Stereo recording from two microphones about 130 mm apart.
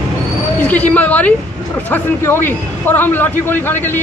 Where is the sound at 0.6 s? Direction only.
10° left (ahead or behind).